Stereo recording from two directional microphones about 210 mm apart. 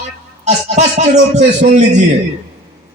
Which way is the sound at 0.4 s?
35° right (ahead or behind).